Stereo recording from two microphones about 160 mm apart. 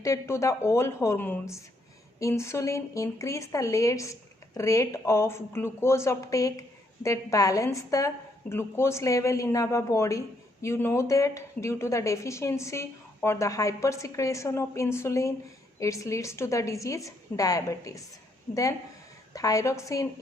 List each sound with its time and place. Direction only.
0.0 s a woman's voice: 20° left (ahead or behind)
19.3 s speech: 20° left (ahead or behind)